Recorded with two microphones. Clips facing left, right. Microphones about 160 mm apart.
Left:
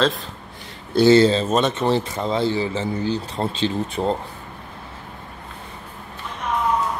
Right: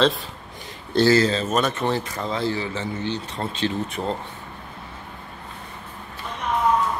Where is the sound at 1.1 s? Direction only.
30° left (ahead or behind).